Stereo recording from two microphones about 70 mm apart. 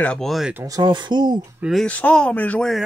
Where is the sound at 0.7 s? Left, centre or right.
Right.